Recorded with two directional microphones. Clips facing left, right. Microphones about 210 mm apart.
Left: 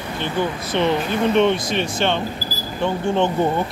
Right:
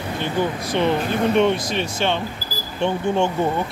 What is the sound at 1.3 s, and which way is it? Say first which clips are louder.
Speech: left 2 dB; 10° right (ahead or behind).